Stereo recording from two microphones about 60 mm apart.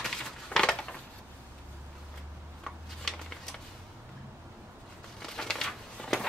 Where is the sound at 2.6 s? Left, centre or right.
Centre.